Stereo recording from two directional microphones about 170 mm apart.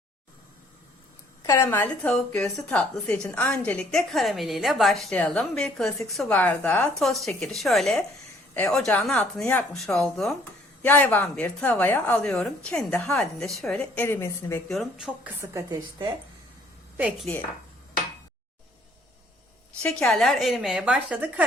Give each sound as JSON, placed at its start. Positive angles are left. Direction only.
{"t": 1.5, "sound": "a woman's voice", "side_deg": 15}
{"t": 14.7, "sound": "a woman's voice", "side_deg": 0}
{"t": 15.4, "sound": "a woman's voice", "side_deg": -20}
{"t": 19.8, "sound": "a woman's voice", "side_deg": 5}